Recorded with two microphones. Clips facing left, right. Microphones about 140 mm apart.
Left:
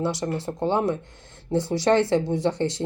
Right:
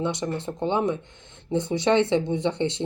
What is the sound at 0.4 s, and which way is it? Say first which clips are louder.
Speech: left 1 dB; 10° left (ahead or behind).